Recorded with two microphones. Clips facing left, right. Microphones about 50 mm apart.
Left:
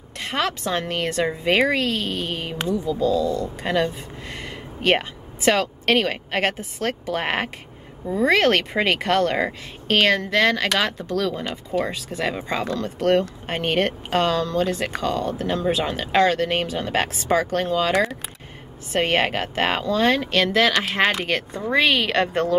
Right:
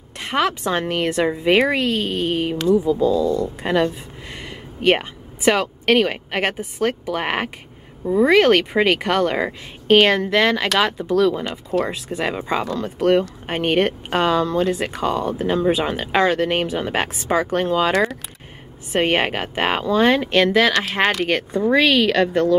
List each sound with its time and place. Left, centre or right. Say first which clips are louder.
0.2 s speech: right 4 dB; centre
20.4 s speech: right 2 dB; centre
21.3 s speech: right 6 dB; centre
21.7 s speech: right 2 dB; centre; by 22.5 s left